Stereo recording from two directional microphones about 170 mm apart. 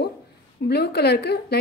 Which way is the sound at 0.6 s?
70° left (ahead or behind).